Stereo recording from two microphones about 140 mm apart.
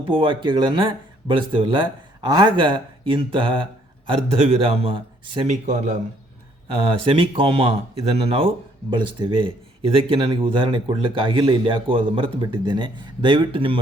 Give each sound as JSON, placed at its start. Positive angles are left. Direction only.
{"t": 0.0, "sound": "speech", "side_deg": -40}
{"t": 5.5, "sound": "speech", "side_deg": -55}
{"t": 6.8, "sound": "speech", "side_deg": -40}